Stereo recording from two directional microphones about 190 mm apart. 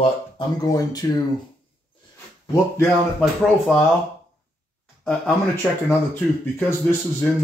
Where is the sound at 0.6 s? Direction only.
20° left (ahead or behind).